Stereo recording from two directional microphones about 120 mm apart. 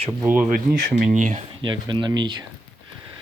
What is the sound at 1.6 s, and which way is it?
Speech, 40° right (ahead or behind).